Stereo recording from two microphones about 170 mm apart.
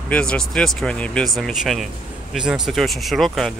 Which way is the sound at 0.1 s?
5° left (ahead or behind).